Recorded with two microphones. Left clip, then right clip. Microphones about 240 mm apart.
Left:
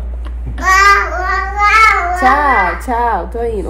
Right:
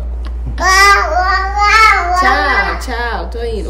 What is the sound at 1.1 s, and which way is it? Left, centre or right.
Child singing, centre.